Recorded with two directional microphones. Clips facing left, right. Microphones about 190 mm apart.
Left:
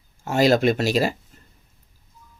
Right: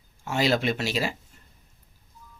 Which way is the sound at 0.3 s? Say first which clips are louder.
Left 7 dB; 45° left (ahead or behind).